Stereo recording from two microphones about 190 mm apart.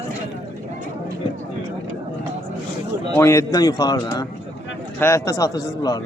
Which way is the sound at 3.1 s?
15° left (ahead or behind).